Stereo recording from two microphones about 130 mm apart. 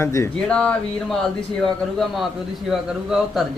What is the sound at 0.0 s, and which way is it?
Speech, 20° left (ahead or behind).